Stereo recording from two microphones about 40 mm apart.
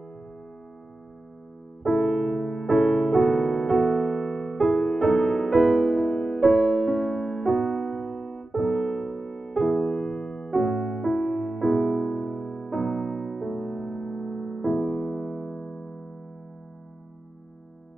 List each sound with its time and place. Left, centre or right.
1.8 s music: centre